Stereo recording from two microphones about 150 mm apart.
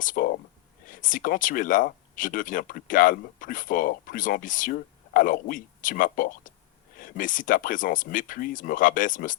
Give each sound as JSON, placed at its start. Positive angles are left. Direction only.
{"t": 0.0, "sound": "speech", "side_deg": 65}